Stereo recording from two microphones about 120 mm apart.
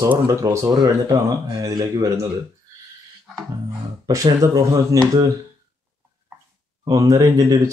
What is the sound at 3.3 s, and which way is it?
Music, centre (ahead or behind).